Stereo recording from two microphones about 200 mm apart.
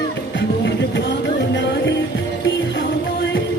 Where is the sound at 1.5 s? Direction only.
60° left (ahead or behind).